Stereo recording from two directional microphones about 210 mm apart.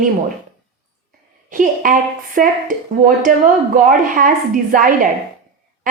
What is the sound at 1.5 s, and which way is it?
Speech, 40° right (ahead or behind).